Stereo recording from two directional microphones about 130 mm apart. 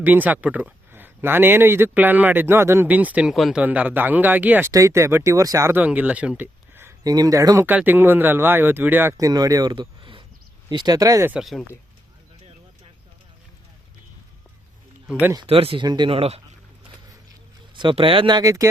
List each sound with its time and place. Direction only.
0.0 s speech: 15° right (ahead or behind)
4.7 s speech: 25° right (ahead or behind)
7.0 s speech: 30° right (ahead or behind)
7.7 s speech: 15° right (ahead or behind)
9.1 s speech: 30° right (ahead or behind)
11.3 s speech: centre (ahead or behind)
15.4 s speech: 45° right (ahead or behind)
17.7 s speech: 40° right (ahead or behind)